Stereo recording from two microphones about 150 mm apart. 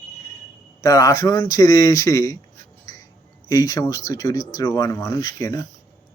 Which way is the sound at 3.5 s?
25° left (ahead or behind).